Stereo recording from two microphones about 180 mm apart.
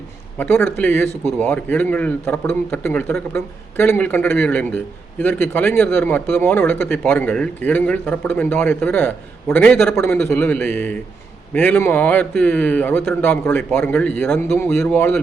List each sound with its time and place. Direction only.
0.3 s speech: 10° left (ahead or behind)